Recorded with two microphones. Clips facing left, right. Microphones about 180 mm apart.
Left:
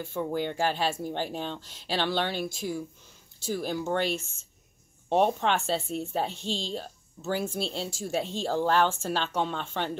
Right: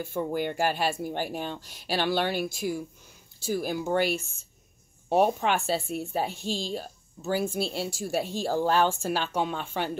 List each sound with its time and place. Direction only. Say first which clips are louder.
0.0 s a woman's voice: right 1 dB; 10° right (ahead or behind)